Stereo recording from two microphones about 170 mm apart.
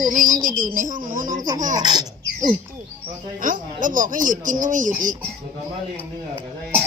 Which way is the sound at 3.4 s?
50° right (ahead or behind).